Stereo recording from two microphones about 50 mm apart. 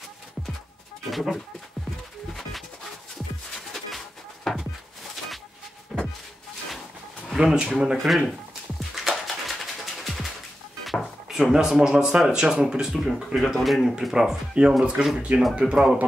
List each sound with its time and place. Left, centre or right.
1.1 s speech: centre
3.5 s music: centre
4.5 s a sound: centre
5.9 s a sound: centre
7.3 s speech: centre
8.1 s a sound: centre
11.6 s speech: centre
14.8 s speech: centre
15.3 s speech: right
15.7 s speech: centre